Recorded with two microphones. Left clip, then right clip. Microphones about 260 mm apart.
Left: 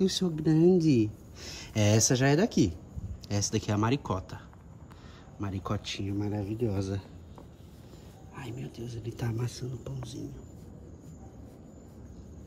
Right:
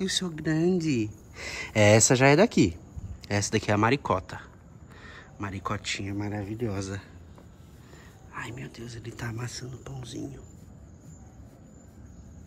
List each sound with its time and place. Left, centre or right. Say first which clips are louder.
0.0 s speech: left 1 dB; centre
8.4 s speech: right 4 dB; centre